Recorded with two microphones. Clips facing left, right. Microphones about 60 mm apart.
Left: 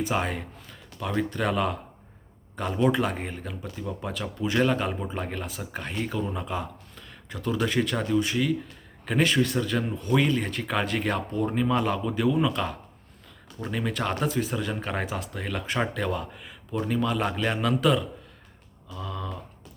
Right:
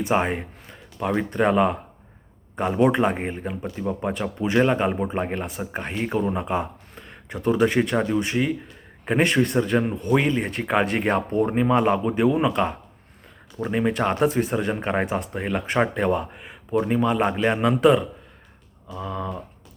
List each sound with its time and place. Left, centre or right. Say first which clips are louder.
0.1 s speech: right 6 dB; right